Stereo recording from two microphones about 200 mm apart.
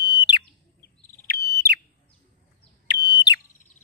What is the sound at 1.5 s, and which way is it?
Bird, 55° right (ahead or behind).